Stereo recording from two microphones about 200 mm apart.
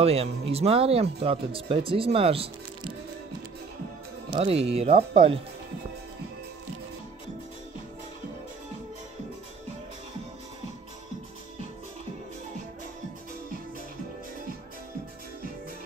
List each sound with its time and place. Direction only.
0.0 s speech: 30° right (ahead or behind)
4.3 s speech: 25° right (ahead or behind)